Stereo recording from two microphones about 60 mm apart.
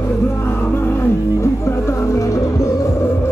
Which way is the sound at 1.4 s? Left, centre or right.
Left.